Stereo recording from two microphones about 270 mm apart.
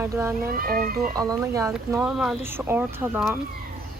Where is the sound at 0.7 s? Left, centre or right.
Right.